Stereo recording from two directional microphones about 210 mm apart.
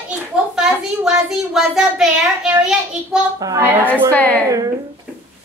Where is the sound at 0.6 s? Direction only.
Centre (ahead or behind).